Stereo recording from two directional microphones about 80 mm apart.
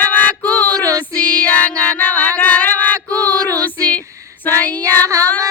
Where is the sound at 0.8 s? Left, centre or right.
Right.